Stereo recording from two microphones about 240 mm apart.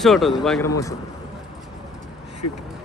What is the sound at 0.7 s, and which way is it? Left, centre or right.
Speech, centre.